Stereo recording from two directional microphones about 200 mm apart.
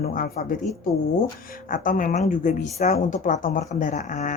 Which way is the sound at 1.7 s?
40° left (ahead or behind).